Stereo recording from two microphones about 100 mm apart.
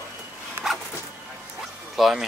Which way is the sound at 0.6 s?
25° right (ahead or behind).